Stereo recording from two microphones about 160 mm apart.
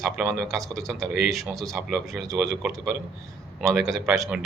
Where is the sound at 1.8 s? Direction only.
Centre (ahead or behind).